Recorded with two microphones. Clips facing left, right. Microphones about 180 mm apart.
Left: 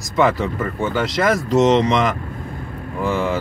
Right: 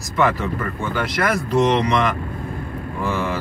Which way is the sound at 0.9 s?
20° left (ahead or behind).